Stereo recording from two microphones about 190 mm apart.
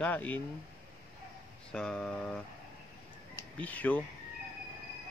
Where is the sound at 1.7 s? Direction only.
5° left (ahead or behind).